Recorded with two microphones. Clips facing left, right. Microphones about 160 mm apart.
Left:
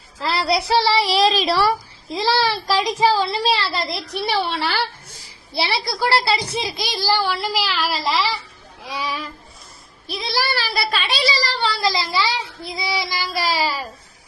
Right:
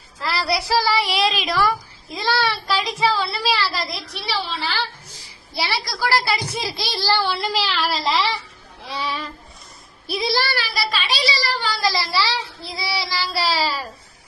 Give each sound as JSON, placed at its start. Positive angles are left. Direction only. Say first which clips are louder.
{"t": 0.2, "sound": "speech", "louder": "left 3 dB", "side_deg": 25}
{"t": 4.1, "sound": "a woman's voice", "louder": "left 7 dB", "side_deg": 50}
{"t": 5.5, "sound": "a woman's voice", "louder": "left 3 dB", "side_deg": 25}
{"t": 8.8, "sound": "a sound", "louder": "even", "side_deg": 10}
{"t": 10.1, "sound": "speech", "louder": "right 5 dB", "side_deg": -5}
{"t": 10.8, "sound": "a child's voice", "louder": "left 1 dB", "side_deg": 50}
{"t": 11.4, "sound": "a woman's voice", "louder": "left 1 dB", "side_deg": 30}